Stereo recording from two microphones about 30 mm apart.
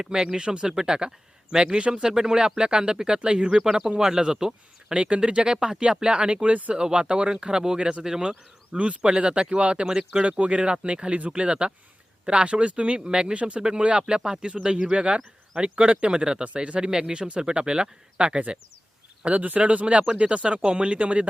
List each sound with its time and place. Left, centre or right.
0.0 s a man's voice: right
3.6 s speech: right
4.9 s a man's voice: right
5.5 s a man's voice: centre
7.8 s a man's voice: right
13.6 s speech: right
13.8 s a man's voice: right
19.2 s a man's voice: right